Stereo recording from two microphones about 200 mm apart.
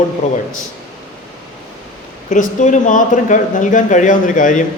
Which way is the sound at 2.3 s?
40° left (ahead or behind).